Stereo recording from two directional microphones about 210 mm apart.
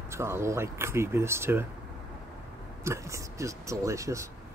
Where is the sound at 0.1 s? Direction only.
10° right (ahead or behind).